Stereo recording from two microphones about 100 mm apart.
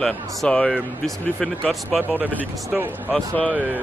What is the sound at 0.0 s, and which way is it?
Speech, 10° left (ahead or behind).